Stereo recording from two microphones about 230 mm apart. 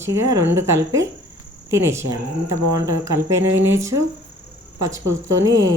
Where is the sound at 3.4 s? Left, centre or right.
Right.